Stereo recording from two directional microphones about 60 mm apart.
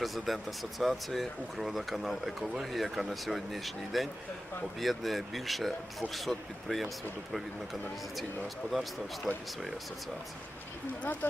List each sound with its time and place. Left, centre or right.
0.0 s speech: centre
11.0 s speech: left